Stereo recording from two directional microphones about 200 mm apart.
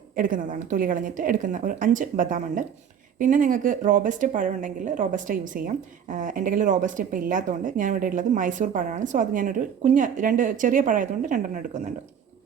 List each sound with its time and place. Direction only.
0.2 s speech: 40° right (ahead or behind)